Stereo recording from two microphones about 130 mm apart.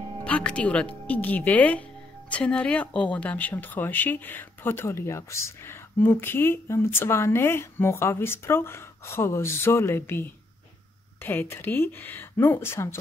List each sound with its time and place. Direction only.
0.2 s speech: 10° left (ahead or behind)